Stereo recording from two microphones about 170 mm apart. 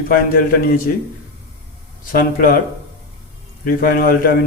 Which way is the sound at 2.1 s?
55° left (ahead or behind).